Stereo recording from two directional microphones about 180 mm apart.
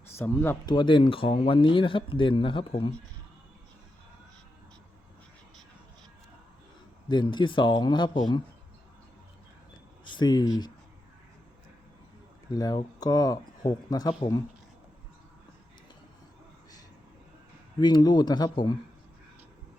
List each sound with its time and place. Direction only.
0.1 s speech: 15° left (ahead or behind)
7.1 s speech: 25° left (ahead or behind)
10.0 s a sound: 25° left (ahead or behind)
12.5 s speech: 20° left (ahead or behind)
17.7 s speech: 25° left (ahead or behind)